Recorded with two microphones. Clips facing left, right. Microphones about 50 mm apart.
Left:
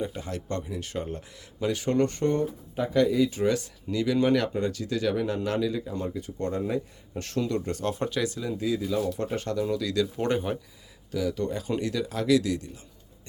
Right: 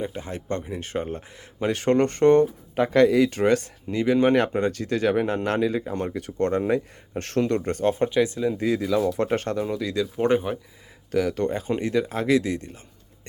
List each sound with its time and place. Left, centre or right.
0.0 s speech: right
3.8 s speech: right
7.9 s speech: right
8.5 s speech: right
8.8 s speech: right
9.3 s speech: right
9.6 s speech: right
11.1 s speech: right
11.5 s speech: right